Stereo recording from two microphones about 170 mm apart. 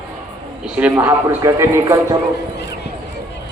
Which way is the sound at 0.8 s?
10° right (ahead or behind).